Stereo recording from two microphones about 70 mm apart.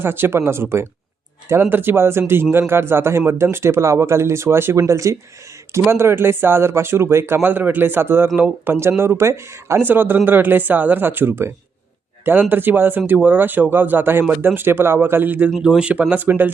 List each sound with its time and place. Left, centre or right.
0.0 s a man's voice: right
5.9 s a man's voice: right
7.4 s a man's voice: right
9.8 s speech: right
15.6 s speech: centre